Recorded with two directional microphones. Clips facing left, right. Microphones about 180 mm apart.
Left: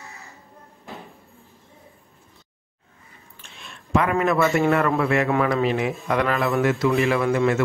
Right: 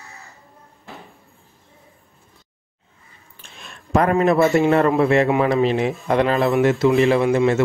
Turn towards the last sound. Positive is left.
turn(degrees=-25)  # may be behind; listen again after turning